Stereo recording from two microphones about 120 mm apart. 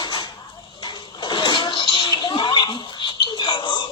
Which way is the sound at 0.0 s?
40° left (ahead or behind).